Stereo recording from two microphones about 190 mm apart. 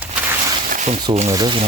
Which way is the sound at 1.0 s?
30° right (ahead or behind).